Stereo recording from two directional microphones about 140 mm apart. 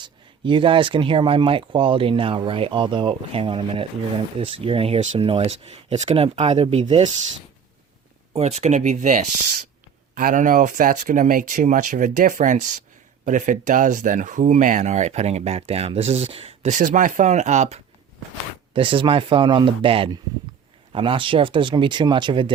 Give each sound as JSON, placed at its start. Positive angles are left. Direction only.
{"t": 0.0, "sound": "speech", "side_deg": -35}
{"t": 8.3, "sound": "speech", "side_deg": -50}
{"t": 10.2, "sound": "speech", "side_deg": -70}
{"t": 16.7, "sound": "speech", "side_deg": -65}
{"t": 18.7, "sound": "speech", "side_deg": -40}